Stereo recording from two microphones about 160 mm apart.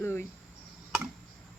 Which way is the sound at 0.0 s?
15° left (ahead or behind).